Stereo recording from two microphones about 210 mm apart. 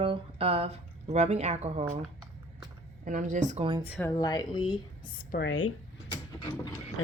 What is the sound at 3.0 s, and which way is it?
Speech, 40° right (ahead or behind).